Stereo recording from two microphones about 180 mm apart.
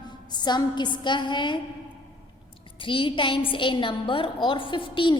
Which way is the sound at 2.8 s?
30° left (ahead or behind).